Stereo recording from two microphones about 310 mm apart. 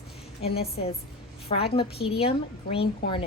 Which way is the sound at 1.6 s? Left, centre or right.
Centre.